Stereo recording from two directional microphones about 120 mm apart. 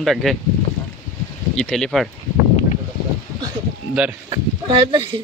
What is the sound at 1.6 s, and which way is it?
Speech, 5° left (ahead or behind).